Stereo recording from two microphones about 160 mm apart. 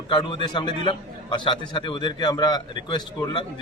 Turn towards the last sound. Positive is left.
turn(degrees=30)  # may be behind; listen again after turning